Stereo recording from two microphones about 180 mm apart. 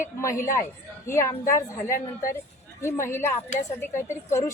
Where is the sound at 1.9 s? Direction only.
50° left (ahead or behind).